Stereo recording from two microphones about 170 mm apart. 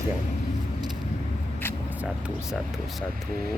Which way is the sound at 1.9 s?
10° right (ahead or behind).